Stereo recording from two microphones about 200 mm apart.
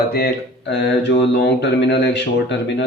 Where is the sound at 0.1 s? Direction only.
55° left (ahead or behind).